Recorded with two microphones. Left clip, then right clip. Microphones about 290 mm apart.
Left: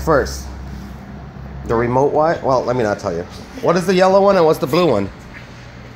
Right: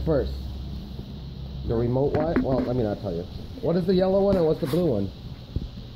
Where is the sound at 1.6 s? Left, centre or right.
Left.